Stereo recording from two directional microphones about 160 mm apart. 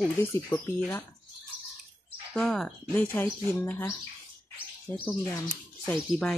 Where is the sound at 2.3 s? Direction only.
5° left (ahead or behind).